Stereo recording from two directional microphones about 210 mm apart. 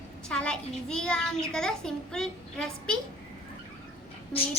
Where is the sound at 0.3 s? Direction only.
5° left (ahead or behind).